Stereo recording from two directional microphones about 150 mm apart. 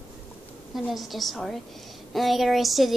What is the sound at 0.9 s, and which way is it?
A woman's voice, centre (ahead or behind).